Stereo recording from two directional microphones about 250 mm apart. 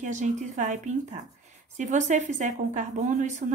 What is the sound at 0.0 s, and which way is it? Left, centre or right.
Speech, right.